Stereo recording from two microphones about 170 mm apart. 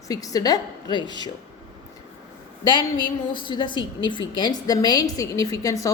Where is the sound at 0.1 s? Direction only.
20° left (ahead or behind).